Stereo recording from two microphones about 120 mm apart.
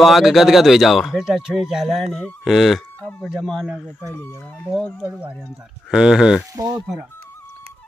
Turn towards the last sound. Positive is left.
turn(degrees=-30)  # may be behind; listen again after turning